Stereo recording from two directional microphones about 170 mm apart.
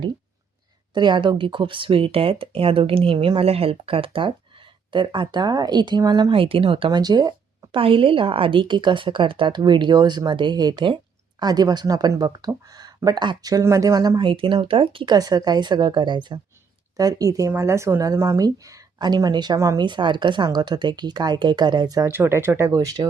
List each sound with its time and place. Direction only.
0.9 s speech: 25° right (ahead or behind)